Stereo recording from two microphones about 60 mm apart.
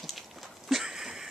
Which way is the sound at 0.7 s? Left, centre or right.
Centre.